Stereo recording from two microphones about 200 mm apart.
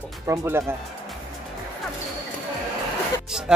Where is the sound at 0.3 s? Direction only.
15° right (ahead or behind).